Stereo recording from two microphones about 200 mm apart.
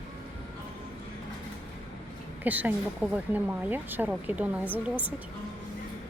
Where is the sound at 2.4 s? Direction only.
10° right (ahead or behind).